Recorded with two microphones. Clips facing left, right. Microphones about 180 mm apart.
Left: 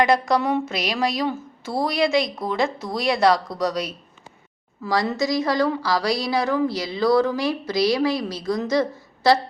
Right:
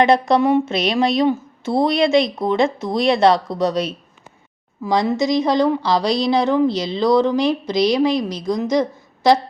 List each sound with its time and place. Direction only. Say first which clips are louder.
0.0 s a woman's voice: right 5 dB; 25° right (ahead or behind)